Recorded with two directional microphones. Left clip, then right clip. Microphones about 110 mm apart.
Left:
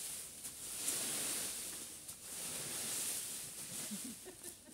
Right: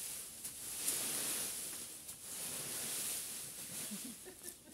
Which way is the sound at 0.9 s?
25° right (ahead or behind).